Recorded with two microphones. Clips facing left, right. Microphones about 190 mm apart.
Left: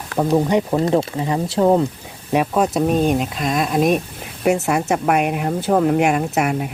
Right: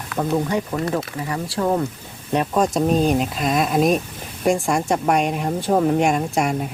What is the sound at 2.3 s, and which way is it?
Speech, 5° left (ahead or behind).